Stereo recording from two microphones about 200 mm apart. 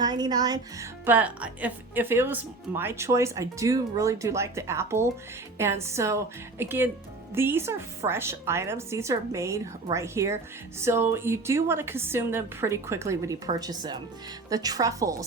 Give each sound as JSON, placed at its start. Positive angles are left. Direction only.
{"t": 0.0, "sound": "speech", "side_deg": -20}